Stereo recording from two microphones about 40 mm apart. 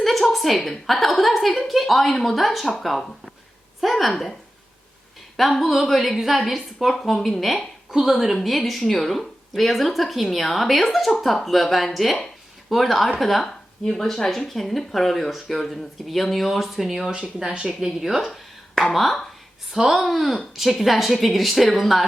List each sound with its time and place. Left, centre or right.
0.0 s a woman's voice: centre
3.9 s a woman's voice: centre
5.4 s a woman's voice: centre
6.9 s a woman's voice: centre
17.1 s speech: centre
18.3 s a sound: centre
18.9 s a woman's voice: centre